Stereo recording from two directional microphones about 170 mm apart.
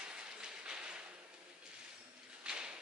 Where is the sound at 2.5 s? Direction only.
5° right (ahead or behind).